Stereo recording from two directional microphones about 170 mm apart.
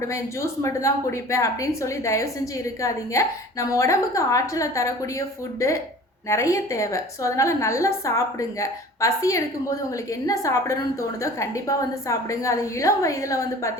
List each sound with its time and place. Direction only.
0.1 s a woman's voice: 15° left (ahead or behind)